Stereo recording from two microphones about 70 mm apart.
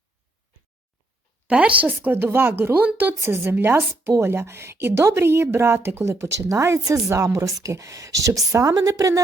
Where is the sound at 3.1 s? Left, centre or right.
Right.